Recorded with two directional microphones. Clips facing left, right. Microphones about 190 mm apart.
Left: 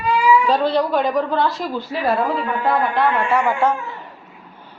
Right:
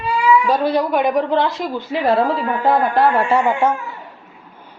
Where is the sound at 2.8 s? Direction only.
45° right (ahead or behind).